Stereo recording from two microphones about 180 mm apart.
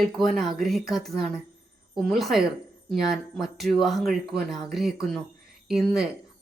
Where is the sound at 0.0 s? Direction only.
Centre (ahead or behind).